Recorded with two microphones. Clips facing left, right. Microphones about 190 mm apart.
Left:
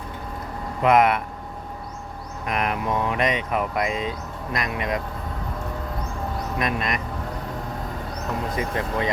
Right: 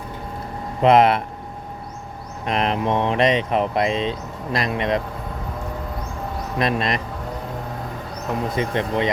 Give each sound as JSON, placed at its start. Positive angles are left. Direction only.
{"t": 0.8, "sound": "speech", "side_deg": -30}
{"t": 2.5, "sound": "speech", "side_deg": -30}
{"t": 6.6, "sound": "speech", "side_deg": -30}
{"t": 8.5, "sound": "speech", "side_deg": -25}